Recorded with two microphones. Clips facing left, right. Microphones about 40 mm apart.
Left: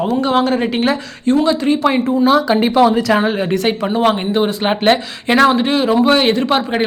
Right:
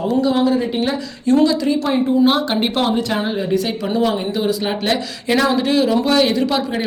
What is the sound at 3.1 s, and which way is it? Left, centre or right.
Speech, left.